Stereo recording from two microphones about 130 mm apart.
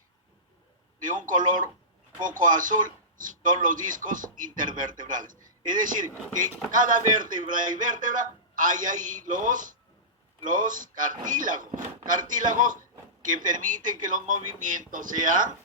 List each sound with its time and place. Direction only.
1.0 s a man's voice: 90° right